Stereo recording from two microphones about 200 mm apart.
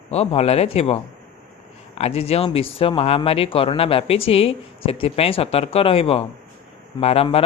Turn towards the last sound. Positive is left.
turn(degrees=30)  # may be behind; listen again after turning